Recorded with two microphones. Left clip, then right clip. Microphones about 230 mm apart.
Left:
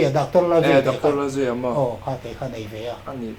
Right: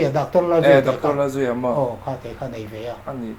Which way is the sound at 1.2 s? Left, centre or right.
Right.